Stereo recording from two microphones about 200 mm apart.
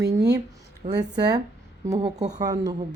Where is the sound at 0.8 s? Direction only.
25° right (ahead or behind).